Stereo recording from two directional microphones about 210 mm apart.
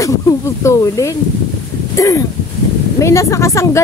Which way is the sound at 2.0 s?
15° left (ahead or behind).